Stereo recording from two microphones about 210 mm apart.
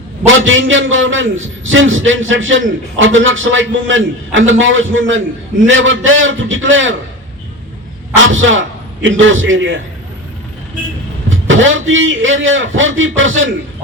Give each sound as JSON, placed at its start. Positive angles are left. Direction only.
{"t": 0.4, "sound": "a man's voice", "side_deg": -65}
{"t": 8.1, "sound": "a man's voice", "side_deg": -65}
{"t": 11.3, "sound": "a man's voice", "side_deg": -65}